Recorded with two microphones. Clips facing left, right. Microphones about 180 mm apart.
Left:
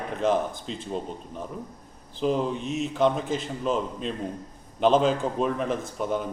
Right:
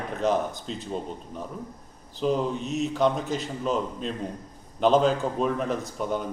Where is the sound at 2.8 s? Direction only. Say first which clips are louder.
Even; centre (ahead or behind).